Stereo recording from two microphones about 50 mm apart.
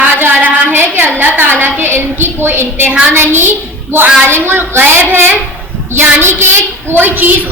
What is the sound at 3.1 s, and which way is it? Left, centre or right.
A child's voice, right.